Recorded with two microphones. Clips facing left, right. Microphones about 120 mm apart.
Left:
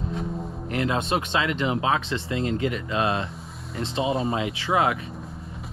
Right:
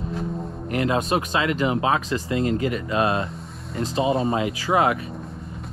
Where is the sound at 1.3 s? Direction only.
40° right (ahead or behind).